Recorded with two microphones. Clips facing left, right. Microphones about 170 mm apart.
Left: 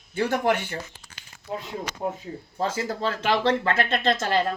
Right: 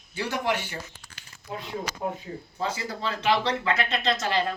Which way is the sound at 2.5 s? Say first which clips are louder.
Left 4 dB; 50° left (ahead or behind).